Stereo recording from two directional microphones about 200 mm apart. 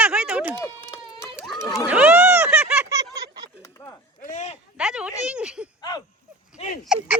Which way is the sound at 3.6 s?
15° left (ahead or behind).